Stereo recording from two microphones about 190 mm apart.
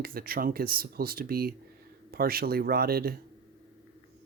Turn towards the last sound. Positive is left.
turn(degrees=-55)  # may be behind; listen again after turning